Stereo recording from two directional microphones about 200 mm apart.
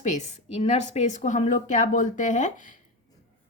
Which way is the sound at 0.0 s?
35° left (ahead or behind).